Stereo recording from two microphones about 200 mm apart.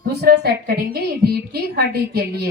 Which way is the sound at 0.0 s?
50° right (ahead or behind).